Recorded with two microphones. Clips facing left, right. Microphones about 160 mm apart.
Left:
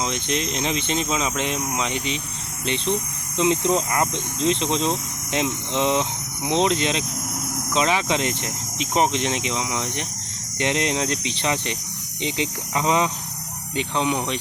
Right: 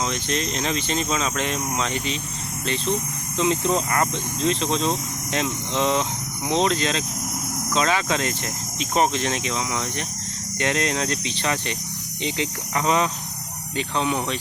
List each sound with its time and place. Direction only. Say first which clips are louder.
0.0 s speech: even; 20° left (ahead or behind)